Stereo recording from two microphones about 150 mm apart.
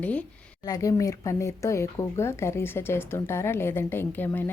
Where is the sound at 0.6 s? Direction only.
25° left (ahead or behind).